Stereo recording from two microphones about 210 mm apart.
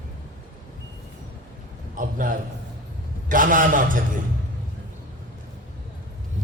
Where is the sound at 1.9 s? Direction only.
40° right (ahead or behind).